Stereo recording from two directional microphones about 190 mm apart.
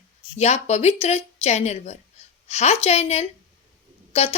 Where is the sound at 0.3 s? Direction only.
35° left (ahead or behind).